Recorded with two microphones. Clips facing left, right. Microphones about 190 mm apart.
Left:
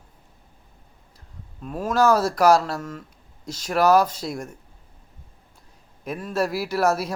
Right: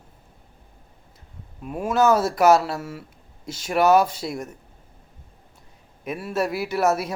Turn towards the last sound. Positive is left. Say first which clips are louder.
# even
turn(degrees=0)  # may be behind; listen again after turning